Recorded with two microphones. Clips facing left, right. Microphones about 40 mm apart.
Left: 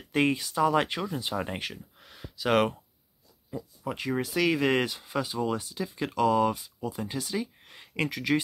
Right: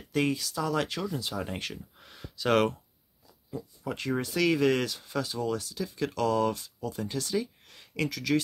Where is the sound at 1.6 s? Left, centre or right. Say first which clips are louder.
Left 1 dB; centre.